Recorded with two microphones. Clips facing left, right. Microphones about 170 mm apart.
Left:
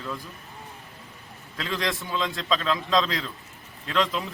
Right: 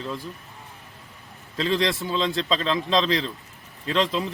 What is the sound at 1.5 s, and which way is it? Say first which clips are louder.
Speech: right 6 dB; 25° right (ahead or behind).